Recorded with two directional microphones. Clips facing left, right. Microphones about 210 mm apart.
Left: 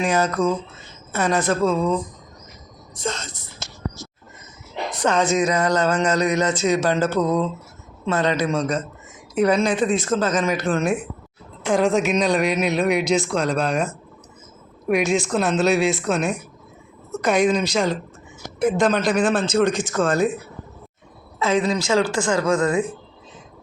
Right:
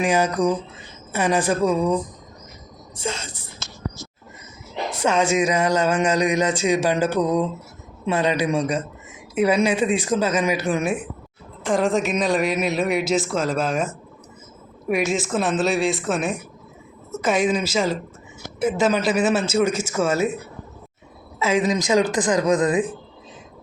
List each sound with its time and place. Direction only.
0.0 s speech: 10° right (ahead or behind)
2.9 s a sound: 10° right (ahead or behind)
5.0 s speech: 10° right (ahead or behind)
11.6 s speech: centre (ahead or behind)
21.3 s speech: 10° right (ahead or behind)